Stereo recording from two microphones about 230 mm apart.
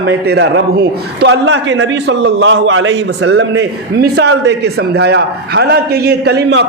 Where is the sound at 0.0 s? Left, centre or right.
Right.